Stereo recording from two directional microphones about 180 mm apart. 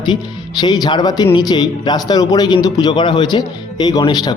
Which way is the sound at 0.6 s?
25° left (ahead or behind).